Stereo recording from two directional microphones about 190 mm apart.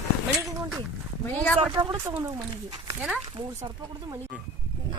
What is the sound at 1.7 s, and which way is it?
Speech, 20° right (ahead or behind).